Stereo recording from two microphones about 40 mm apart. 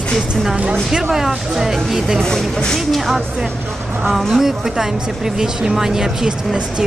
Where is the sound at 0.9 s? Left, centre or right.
Centre.